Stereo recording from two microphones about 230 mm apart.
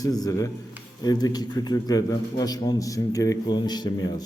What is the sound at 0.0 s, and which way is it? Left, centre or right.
A man's voice, centre.